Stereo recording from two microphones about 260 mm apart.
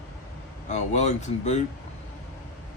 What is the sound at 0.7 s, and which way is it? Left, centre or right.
Speech, left.